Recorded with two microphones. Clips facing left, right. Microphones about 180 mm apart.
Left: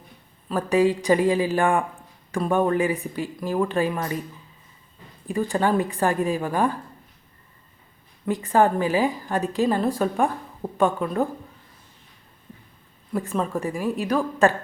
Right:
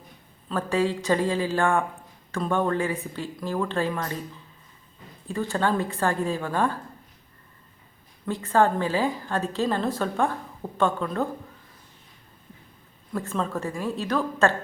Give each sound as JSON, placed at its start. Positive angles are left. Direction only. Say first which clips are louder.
{"t": 0.4, "sound": "a woman's voice", "louder": "left 5 dB", "side_deg": 15}
{"t": 5.3, "sound": "a woman's voice", "louder": "left 3 dB", "side_deg": 15}
{"t": 8.3, "sound": "a woman's voice", "louder": "left 2 dB", "side_deg": 15}
{"t": 13.1, "sound": "a woman's voice", "louder": "left 3 dB", "side_deg": 15}